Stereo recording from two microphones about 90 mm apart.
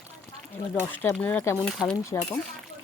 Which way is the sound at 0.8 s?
20° left (ahead or behind).